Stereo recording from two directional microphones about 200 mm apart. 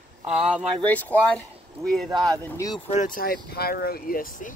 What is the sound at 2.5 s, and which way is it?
Speech, 20° left (ahead or behind).